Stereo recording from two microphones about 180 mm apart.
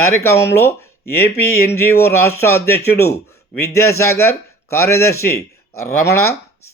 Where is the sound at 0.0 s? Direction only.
15° left (ahead or behind).